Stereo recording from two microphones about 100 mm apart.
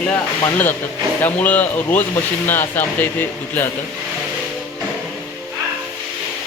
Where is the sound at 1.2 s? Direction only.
15° left (ahead or behind).